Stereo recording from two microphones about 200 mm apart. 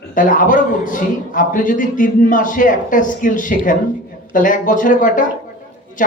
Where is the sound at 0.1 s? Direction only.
40° left (ahead or behind).